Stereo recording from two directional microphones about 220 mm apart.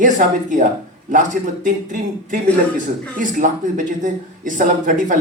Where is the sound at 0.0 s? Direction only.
35° right (ahead or behind).